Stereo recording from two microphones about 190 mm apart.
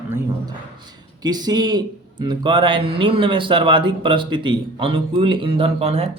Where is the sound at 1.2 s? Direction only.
20° right (ahead or behind).